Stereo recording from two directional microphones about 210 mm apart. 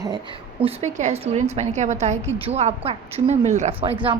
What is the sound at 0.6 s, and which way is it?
A woman's voice, 35° right (ahead or behind).